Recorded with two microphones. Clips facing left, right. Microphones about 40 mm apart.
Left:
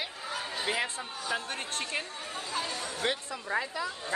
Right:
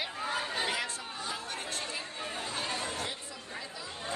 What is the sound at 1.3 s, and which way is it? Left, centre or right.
Chatter, left.